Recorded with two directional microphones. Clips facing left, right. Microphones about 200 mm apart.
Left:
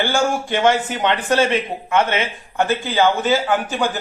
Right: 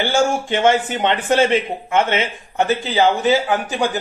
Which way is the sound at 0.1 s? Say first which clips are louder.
Right 2 dB; 20° right (ahead or behind).